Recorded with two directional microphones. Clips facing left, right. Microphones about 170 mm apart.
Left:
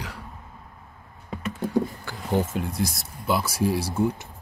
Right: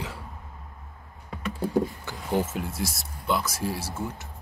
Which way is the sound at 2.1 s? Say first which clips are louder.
Even; 20° right (ahead or behind).